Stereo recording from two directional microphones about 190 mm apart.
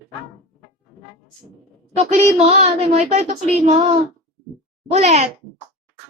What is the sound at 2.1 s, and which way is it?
Speech, 35° right (ahead or behind).